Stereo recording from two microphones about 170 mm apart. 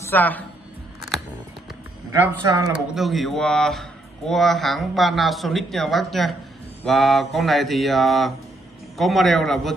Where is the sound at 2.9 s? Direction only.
Centre (ahead or behind).